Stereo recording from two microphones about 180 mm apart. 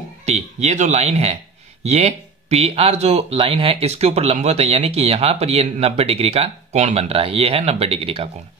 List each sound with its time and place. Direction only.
0.2 s speech: 40° right (ahead or behind)